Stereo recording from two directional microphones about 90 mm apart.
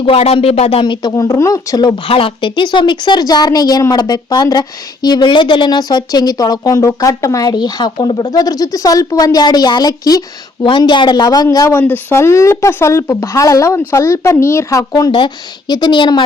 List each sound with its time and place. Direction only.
0.0 s speech: 90° left
1.0 s speech: 40° left (ahead or behind)
2.0 s a woman's voice: 85° left; by 8.3 s 55° left (ahead or behind)
8.3 s speech: 45° left (ahead or behind)
10.6 s a woman's voice: 60° left (ahead or behind)
11.7 s speech: 25° left (ahead or behind); by 15.1 s 40° left (ahead or behind)
15.1 s a woman's voice: 55° left (ahead or behind)